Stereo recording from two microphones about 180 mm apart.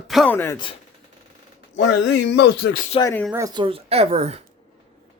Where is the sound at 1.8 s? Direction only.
70° left (ahead or behind); by 2.9 s 55° left (ahead or behind).